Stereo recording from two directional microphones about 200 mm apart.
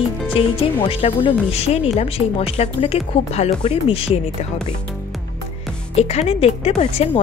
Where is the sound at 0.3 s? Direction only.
30° left (ahead or behind).